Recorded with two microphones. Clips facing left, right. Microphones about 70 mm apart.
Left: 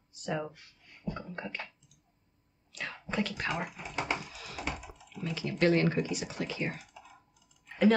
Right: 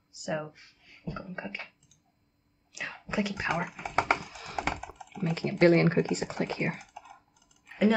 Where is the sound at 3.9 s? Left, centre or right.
Right.